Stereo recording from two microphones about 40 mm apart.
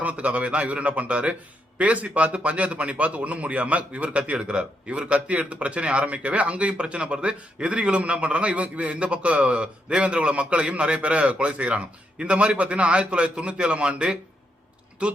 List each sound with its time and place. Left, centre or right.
0.0 s a man's voice: right